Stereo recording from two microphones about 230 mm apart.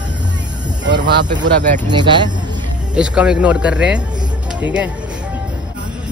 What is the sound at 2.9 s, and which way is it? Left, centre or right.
Speech, centre.